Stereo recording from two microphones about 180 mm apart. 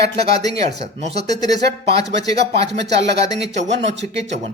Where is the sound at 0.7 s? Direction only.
35° right (ahead or behind).